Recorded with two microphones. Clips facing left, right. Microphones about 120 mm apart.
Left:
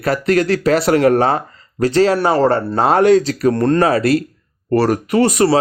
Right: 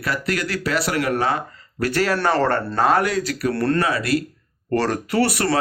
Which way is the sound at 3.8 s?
35° left (ahead or behind).